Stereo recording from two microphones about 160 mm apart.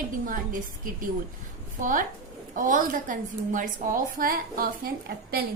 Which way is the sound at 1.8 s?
55° right (ahead or behind).